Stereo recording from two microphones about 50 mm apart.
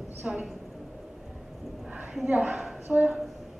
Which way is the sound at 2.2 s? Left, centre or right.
Right.